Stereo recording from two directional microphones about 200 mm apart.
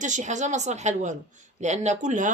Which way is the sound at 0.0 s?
35° right (ahead or behind).